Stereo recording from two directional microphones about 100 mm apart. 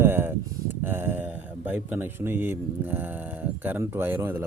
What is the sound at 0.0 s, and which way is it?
Speech, 20° right (ahead or behind).